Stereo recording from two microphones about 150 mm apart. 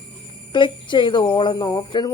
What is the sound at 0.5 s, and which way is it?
Speech, 30° left (ahead or behind).